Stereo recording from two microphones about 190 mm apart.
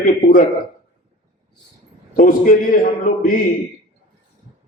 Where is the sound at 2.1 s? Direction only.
45° left (ahead or behind).